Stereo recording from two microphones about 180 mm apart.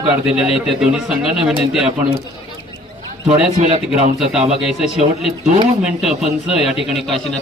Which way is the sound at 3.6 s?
40° right (ahead or behind).